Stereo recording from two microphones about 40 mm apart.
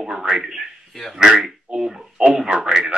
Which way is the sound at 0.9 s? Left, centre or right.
Centre.